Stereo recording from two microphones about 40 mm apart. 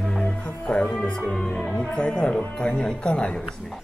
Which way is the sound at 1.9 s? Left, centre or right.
Left.